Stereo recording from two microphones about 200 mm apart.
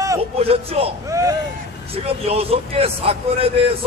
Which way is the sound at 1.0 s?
15° right (ahead or behind).